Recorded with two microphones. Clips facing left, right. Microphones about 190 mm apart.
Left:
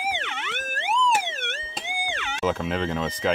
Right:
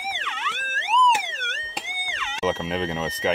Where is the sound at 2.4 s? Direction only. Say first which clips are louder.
Even; 5° right (ahead or behind).